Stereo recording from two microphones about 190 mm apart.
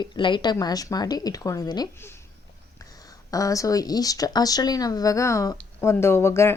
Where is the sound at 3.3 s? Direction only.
20° left (ahead or behind).